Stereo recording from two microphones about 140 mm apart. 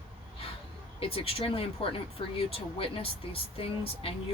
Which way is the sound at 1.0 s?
40° left (ahead or behind).